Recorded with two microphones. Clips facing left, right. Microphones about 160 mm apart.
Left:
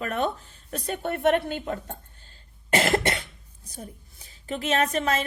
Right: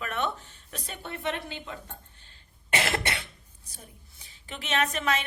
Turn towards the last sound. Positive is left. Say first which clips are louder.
# left 4 dB
turn(degrees=40)  # may be behind; listen again after turning